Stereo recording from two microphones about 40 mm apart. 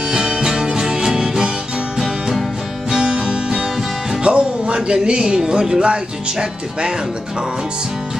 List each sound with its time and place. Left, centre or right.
0.1 s music: centre
2.9 s music: centre
4.2 s speech: right